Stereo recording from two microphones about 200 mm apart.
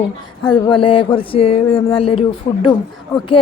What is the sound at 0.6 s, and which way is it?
Speech, 25° left (ahead or behind).